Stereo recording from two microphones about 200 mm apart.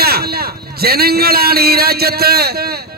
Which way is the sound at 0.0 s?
50° right (ahead or behind).